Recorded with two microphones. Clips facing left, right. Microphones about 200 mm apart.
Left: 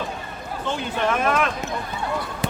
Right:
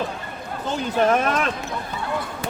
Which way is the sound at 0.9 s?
40° right (ahead or behind).